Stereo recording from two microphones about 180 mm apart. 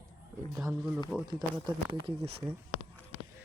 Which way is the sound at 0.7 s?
5° right (ahead or behind).